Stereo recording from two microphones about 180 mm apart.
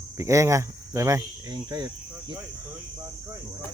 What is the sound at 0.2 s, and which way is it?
Speech, 15° right (ahead or behind).